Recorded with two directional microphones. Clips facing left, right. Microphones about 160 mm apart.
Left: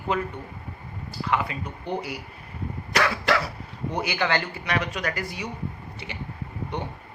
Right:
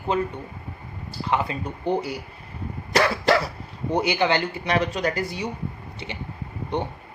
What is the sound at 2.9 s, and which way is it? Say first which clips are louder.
Cough: right 4 dB; 30° right (ahead or behind).